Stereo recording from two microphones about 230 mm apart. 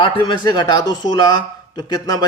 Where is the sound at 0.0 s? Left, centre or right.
Centre.